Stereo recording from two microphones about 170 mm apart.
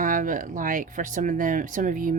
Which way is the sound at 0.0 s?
50° right (ahead or behind).